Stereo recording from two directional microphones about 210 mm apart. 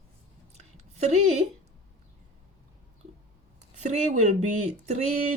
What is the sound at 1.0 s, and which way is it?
Speech, 35° right (ahead or behind).